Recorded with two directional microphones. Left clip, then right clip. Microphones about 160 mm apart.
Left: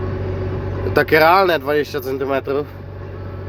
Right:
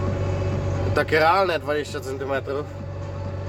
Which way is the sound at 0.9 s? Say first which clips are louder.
Left 6 dB; 20° left (ahead or behind).